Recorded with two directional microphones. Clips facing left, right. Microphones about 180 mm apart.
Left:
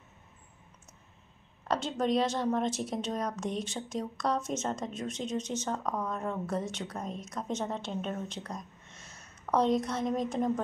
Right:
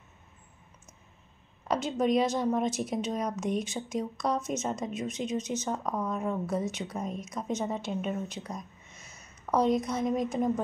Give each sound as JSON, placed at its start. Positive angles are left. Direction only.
{"t": 1.7, "sound": "a woman's voice", "side_deg": -10}